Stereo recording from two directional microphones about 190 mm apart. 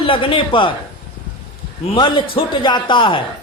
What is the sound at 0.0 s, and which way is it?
Speech, 30° left (ahead or behind).